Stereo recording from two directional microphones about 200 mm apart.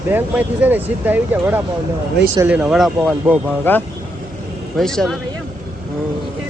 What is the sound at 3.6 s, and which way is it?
Speech, 10° left (ahead or behind).